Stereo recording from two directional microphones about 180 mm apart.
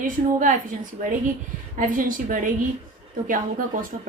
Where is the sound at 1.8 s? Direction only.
50° right (ahead or behind).